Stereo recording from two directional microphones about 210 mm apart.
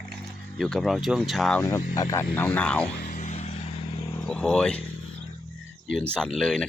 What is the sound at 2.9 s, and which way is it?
Vehicle, 40° left (ahead or behind).